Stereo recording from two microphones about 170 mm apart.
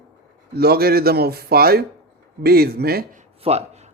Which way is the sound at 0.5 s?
65° right (ahead or behind).